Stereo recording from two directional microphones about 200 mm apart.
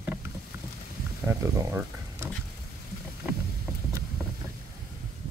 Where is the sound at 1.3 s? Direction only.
10° right (ahead or behind).